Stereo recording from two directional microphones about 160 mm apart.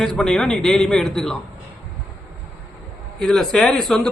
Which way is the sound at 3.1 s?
Centre (ahead or behind).